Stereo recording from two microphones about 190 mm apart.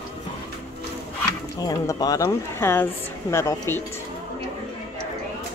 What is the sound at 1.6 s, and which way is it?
A woman's voice, 20° left (ahead or behind).